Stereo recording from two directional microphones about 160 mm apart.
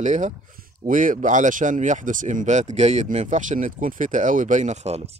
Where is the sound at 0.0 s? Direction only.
50° right (ahead or behind).